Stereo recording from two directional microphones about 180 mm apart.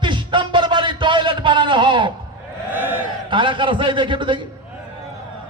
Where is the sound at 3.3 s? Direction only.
25° right (ahead or behind).